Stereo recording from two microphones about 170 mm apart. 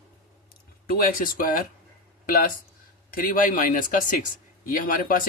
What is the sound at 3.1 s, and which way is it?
Speech, 55° left (ahead or behind).